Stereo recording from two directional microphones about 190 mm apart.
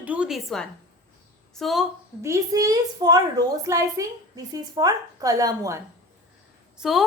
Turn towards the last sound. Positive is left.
turn(degrees=0)  # may be behind; listen again after turning